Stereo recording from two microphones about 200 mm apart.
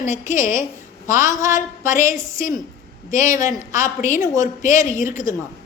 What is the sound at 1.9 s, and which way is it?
Speech, 40° left (ahead or behind).